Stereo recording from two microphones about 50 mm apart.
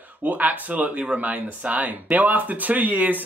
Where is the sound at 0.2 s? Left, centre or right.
Right.